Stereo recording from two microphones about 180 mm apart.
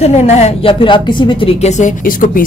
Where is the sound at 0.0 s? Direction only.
35° left (ahead or behind).